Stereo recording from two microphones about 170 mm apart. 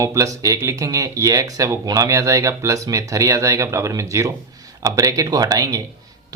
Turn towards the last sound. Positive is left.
turn(degrees=-20)  # may be behind; listen again after turning